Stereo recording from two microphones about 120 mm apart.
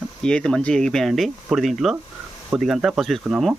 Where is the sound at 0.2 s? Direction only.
5° left (ahead or behind).